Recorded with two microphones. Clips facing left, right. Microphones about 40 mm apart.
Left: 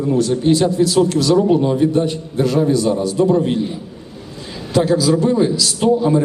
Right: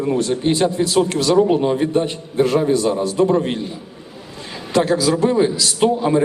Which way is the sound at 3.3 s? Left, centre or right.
Centre.